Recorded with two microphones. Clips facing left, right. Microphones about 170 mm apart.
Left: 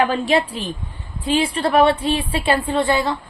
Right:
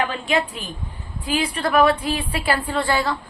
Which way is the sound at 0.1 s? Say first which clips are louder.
Left 4 dB; 35° left (ahead or behind).